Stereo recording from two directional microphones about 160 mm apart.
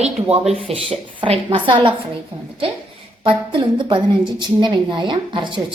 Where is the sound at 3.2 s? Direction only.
30° right (ahead or behind).